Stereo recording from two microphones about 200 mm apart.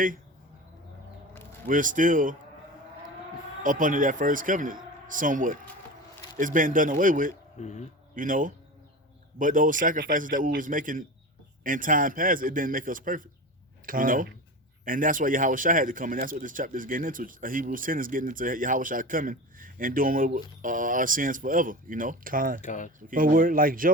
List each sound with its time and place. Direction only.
1.6 s a man's voice: 40° right (ahead or behind)
3.6 s a man's voice: 40° right (ahead or behind)
7.6 s speech: 35° left (ahead or behind)
8.1 s a man's voice: 40° right (ahead or behind)
22.6 s speech: 40° left (ahead or behind)
23.0 s speech: 45° right (ahead or behind)